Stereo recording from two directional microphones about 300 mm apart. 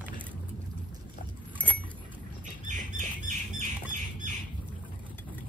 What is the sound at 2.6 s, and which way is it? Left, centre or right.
Squawk, right.